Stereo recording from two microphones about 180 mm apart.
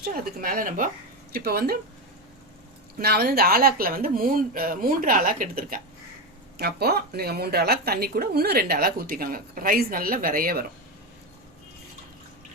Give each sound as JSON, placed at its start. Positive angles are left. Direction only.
{"t": 0.0, "sound": "speech", "side_deg": -55}
{"t": 3.0, "sound": "speech", "side_deg": -60}